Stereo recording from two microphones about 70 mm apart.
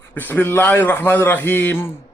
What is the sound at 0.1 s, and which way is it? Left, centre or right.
A man's voice, left.